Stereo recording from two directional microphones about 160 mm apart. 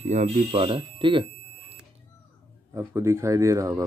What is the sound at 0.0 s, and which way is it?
Speech, 45° right (ahead or behind).